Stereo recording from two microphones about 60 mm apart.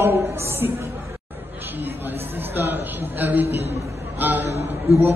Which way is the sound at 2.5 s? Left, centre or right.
Right.